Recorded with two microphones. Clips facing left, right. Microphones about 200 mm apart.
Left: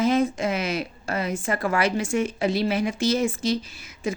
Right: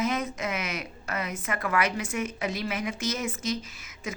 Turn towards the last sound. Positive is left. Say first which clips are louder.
# left 8 dB
turn(degrees=30)  # may be behind; listen again after turning